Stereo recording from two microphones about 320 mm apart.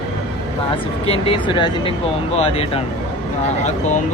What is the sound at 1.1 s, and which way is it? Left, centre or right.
Speech, centre.